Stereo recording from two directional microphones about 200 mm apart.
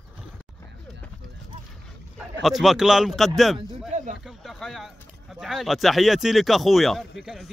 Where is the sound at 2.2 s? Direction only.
Centre (ahead or behind).